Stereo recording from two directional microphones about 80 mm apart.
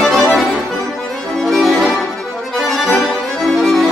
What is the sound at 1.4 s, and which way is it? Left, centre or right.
Music, centre.